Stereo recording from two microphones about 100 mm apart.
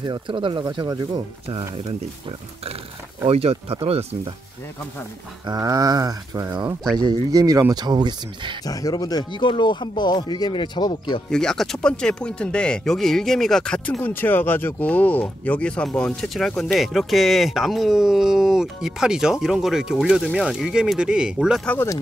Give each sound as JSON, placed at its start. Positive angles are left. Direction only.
{"t": 0.0, "sound": "speech", "side_deg": -50}
{"t": 3.3, "sound": "speech", "side_deg": -85}
{"t": 5.6, "sound": "speech", "side_deg": -40}
{"t": 8.6, "sound": "speech", "side_deg": 40}
{"t": 11.2, "sound": "speech", "side_deg": 5}
{"t": 14.0, "sound": "speech", "side_deg": 20}